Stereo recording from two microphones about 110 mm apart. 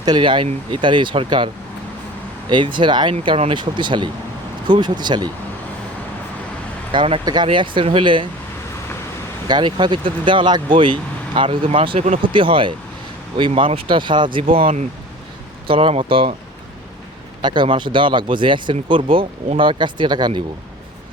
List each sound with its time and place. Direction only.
0.0 s speech: 45° right (ahead or behind)
2.5 s speech: 45° right (ahead or behind)
6.9 s speech: 60° right (ahead or behind)
7.4 s speech: 50° right (ahead or behind)
9.5 s speech: 45° right (ahead or behind); by 12.2 s 75° right (ahead or behind)
12.3 s speech: 50° right (ahead or behind)
17.4 s speech: 45° right (ahead or behind)